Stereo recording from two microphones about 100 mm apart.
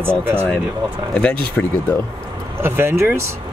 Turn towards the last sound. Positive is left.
turn(degrees=-25)  # may be behind; listen again after turning